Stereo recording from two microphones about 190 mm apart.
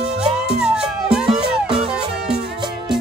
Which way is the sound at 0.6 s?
5° right (ahead or behind).